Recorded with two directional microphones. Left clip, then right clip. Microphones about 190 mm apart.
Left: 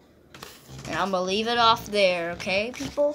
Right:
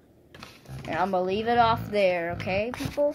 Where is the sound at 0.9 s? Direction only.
10° right (ahead or behind).